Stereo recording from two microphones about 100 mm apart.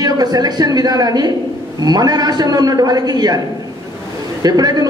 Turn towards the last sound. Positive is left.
turn(degrees=-40)  # may be behind; listen again after turning